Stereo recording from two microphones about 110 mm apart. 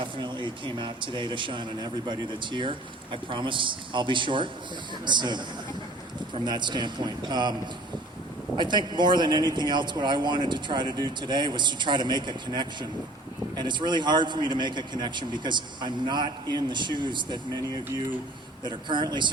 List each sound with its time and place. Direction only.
0.0 s speech: 45° right (ahead or behind)
8.5 s speech: 45° right (ahead or behind)